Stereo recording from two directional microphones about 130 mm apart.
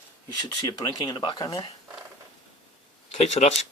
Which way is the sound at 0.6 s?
30° left (ahead or behind).